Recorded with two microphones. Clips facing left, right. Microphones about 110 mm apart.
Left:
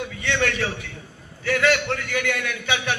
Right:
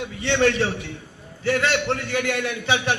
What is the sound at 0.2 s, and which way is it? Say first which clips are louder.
A man's voice: right 5 dB; 30° right (ahead or behind).